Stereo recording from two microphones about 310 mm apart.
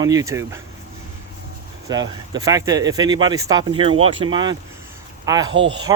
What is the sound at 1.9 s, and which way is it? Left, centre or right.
Speech, centre.